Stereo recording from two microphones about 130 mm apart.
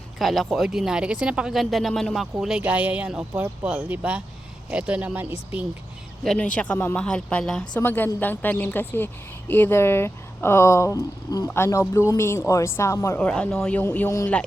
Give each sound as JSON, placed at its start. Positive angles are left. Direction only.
{"t": 0.2, "sound": "speech", "side_deg": 0}
{"t": 6.2, "sound": "speech", "side_deg": 5}
{"t": 7.8, "sound": "speech", "side_deg": 15}
{"t": 13.1, "sound": "speech", "side_deg": 10}